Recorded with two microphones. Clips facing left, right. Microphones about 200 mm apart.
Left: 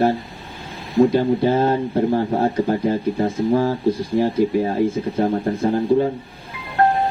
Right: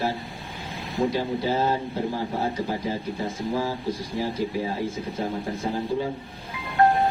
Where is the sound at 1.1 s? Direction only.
55° left (ahead or behind).